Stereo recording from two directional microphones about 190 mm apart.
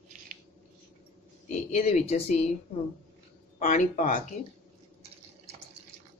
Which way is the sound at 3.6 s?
40° left (ahead or behind).